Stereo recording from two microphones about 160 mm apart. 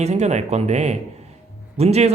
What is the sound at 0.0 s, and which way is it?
Speech, 45° right (ahead or behind).